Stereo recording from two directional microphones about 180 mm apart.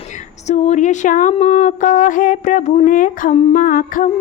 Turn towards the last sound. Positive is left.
turn(degrees=50)  # may be behind; listen again after turning